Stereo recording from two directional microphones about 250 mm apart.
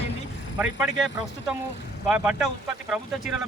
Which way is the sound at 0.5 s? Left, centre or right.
Centre.